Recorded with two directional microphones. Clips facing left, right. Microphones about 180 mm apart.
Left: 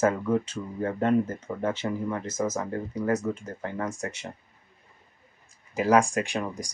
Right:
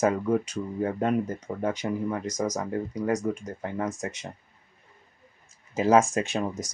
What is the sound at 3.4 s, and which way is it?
Speech, 15° right (ahead or behind).